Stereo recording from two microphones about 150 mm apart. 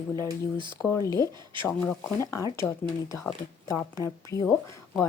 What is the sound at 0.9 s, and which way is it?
Speech, 20° left (ahead or behind).